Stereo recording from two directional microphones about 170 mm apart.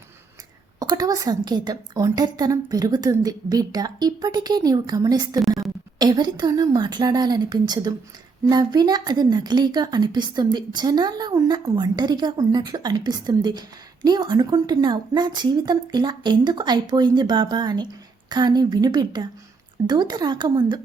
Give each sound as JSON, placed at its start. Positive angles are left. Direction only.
{"t": 0.8, "sound": "a woman's voice", "side_deg": -20}